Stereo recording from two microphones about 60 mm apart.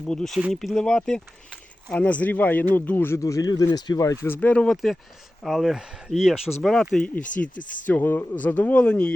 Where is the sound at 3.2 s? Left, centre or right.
Left.